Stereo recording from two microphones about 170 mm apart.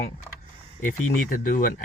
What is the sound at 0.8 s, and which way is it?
Speech, 55° left (ahead or behind).